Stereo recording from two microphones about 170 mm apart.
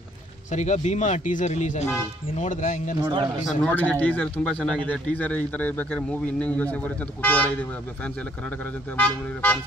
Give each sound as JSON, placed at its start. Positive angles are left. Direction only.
{"t": 0.5, "sound": "speech", "side_deg": 45}
{"t": 3.0, "sound": "a man's voice", "side_deg": -25}
{"t": 3.4, "sound": "speech", "side_deg": 10}
{"t": 8.9, "sound": "speech", "side_deg": 10}